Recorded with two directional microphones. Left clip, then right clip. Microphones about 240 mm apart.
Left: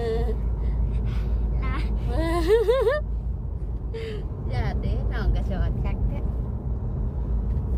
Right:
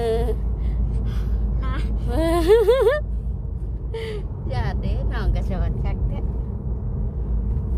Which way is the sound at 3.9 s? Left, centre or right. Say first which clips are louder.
Right 4 dB; right.